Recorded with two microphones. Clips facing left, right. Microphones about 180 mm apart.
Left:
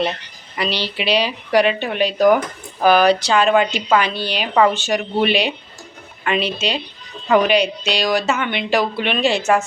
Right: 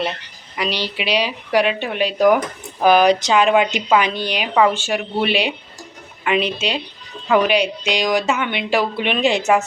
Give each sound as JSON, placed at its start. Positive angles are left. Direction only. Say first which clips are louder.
{"t": 0.5, "sound": "a woman's voice", "louder": "even", "side_deg": -10}